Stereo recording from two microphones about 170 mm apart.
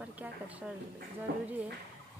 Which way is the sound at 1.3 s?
65° right (ahead or behind).